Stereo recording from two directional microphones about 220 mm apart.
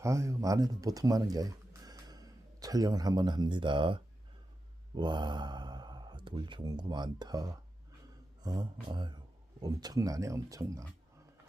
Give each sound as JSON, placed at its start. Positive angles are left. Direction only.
{"t": 0.0, "sound": "speech", "side_deg": -15}